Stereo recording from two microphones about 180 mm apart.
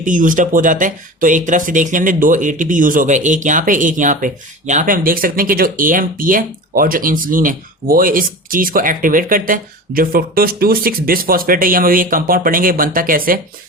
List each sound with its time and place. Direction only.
0.0 s speech: 45° right (ahead or behind)